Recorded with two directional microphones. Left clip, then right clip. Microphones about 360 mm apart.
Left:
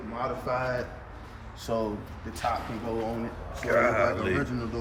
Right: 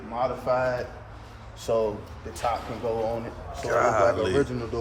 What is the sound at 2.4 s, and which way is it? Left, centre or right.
Speech, centre.